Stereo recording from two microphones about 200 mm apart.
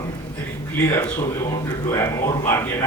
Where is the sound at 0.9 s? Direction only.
10° left (ahead or behind).